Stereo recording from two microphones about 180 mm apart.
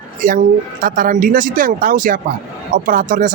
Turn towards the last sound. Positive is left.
turn(degrees=-45)  # may be behind; listen again after turning